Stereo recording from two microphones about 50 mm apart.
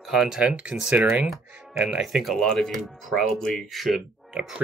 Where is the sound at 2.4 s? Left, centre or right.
Centre.